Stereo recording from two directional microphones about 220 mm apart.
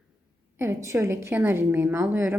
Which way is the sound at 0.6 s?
10° right (ahead or behind).